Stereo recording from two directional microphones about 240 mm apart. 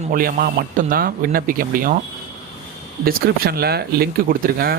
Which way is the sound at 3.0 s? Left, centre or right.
Right.